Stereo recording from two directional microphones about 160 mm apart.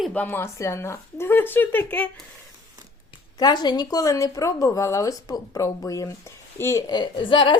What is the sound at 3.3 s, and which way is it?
Speech, 25° left (ahead or behind).